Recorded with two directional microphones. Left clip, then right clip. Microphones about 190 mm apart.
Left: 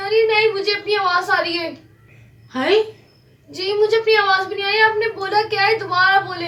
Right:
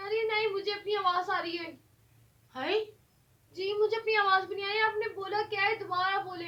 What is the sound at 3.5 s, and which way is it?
Speech, 20° right (ahead or behind).